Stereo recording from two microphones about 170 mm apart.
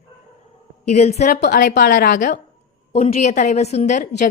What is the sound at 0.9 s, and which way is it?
Speech, 40° left (ahead or behind).